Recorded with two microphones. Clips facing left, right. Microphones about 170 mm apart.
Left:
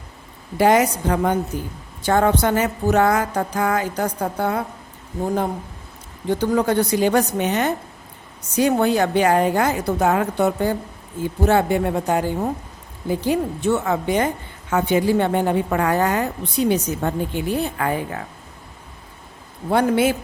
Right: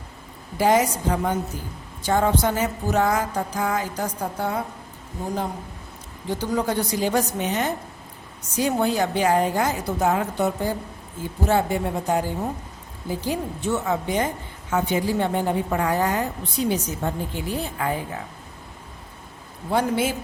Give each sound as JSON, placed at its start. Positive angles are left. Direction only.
{"t": 0.5, "sound": "a woman's voice", "side_deg": 65}
{"t": 6.2, "sound": "a woman's voice", "side_deg": 60}
{"t": 19.7, "sound": "a woman's voice", "side_deg": 65}